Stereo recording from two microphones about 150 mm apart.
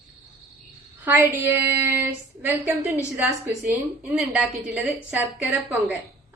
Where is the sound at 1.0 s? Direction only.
10° right (ahead or behind).